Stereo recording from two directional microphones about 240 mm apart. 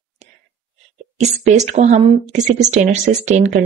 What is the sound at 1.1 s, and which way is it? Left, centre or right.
A woman's voice, right.